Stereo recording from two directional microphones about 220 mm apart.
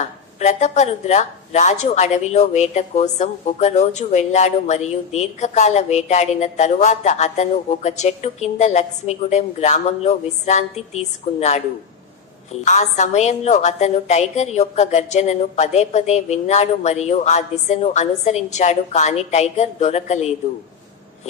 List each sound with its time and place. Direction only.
0.0 s a woman's voice: 30° left (ahead or behind)
12.6 s a woman's voice: 35° left (ahead or behind)